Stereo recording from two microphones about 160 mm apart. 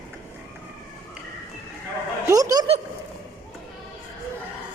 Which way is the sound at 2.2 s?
25° right (ahead or behind).